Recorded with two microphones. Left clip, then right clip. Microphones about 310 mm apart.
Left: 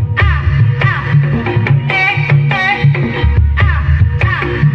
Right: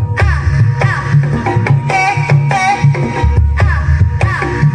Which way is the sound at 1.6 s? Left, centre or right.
Right.